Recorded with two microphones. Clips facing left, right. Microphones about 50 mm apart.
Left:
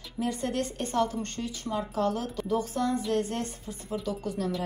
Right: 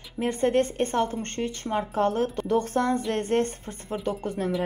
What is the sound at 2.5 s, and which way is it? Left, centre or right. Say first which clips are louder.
A woman's voice: right 3 dB; right.